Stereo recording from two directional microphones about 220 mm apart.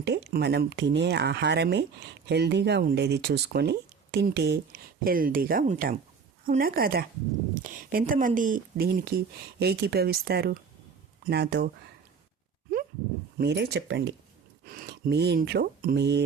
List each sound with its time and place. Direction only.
0.0 s a woman's voice: 50° right (ahead or behind)
13.4 s speech: 50° right (ahead or behind)